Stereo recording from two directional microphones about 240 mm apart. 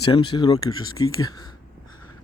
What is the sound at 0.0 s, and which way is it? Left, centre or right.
A man's voice, centre.